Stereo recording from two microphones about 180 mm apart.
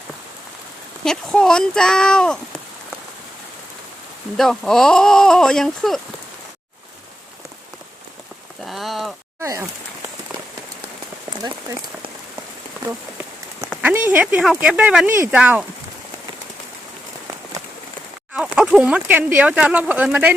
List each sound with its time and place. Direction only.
1.0 s speech: 5° left (ahead or behind)
4.4 s speech: centre (ahead or behind)
8.6 s rain: centre (ahead or behind)
9.4 s a sound: 15° right (ahead or behind)
13.8 s a sound: 10° right (ahead or behind)
14.6 s speech: 5° right (ahead or behind)
18.3 s speech: 5° right (ahead or behind)